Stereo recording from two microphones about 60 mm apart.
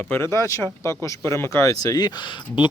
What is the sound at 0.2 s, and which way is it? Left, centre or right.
Speech, left.